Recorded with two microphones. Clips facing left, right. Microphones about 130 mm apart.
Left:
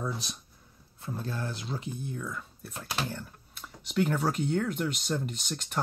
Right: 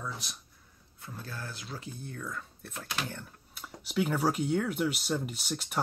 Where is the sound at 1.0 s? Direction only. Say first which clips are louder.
Left 7 dB; 25° left (ahead or behind).